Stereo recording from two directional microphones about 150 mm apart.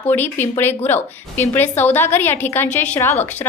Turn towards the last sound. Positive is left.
turn(degrees=10)  # may be behind; listen again after turning